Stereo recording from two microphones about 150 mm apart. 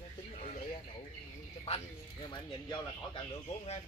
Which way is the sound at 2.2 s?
30° left (ahead or behind).